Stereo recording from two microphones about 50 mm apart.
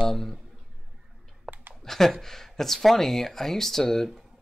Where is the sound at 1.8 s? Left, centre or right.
Centre.